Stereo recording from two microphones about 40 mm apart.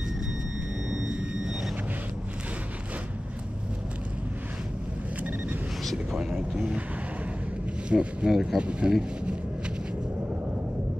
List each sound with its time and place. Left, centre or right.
0.8 s a sound: right
6.1 s speech: centre
7.9 s speech: right
8.3 s speech: centre
8.5 s speech: right